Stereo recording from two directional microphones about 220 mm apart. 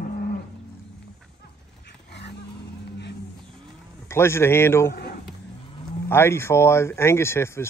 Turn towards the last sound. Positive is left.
turn(degrees=10)  # may be behind; listen again after turning